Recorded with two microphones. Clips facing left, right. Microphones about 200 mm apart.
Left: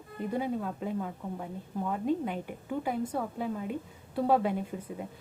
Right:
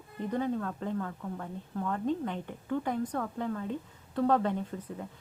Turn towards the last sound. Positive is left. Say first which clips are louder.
# left 1 dB
turn(degrees=10)  # may be behind; listen again after turning